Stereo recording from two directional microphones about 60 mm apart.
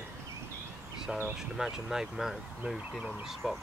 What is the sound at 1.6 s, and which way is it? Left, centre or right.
Speech, centre.